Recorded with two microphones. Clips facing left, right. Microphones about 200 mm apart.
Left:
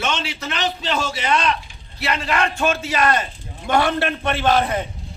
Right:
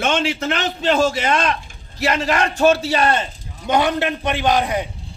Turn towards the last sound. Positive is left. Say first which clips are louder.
# even
turn(degrees=-15)  # may be behind; listen again after turning